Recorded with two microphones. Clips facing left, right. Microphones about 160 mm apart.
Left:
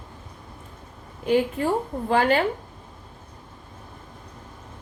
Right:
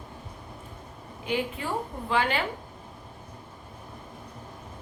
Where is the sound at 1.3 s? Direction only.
45° left (ahead or behind).